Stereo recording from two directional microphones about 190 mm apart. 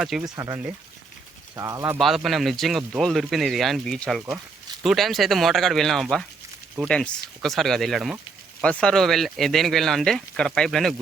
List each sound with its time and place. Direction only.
0.0 s speech: 5° right (ahead or behind)
0.3 s speech: 20° right (ahead or behind)
2.0 s speech: centre (ahead or behind)